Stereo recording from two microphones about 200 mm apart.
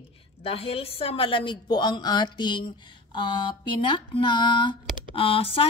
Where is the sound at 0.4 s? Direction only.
30° left (ahead or behind).